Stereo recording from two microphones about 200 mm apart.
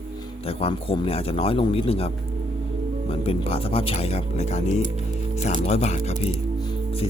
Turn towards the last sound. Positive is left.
turn(degrees=35)  # may be behind; listen again after turning